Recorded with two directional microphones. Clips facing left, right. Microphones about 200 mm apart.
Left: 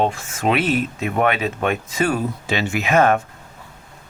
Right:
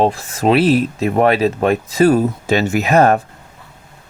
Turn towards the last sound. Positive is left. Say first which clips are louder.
# right 4 dB
turn(degrees=-40)  # may be behind; listen again after turning